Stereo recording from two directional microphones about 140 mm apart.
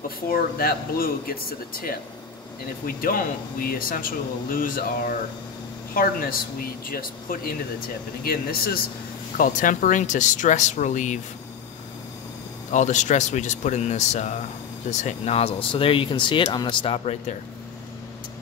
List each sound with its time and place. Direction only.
0.3 s speech: 90° left
3.6 s speech: 90° left
9.6 s speech: 65° left (ahead or behind)
12.7 s speech: 60° left (ahead or behind); by 17.2 s 45° left (ahead or behind)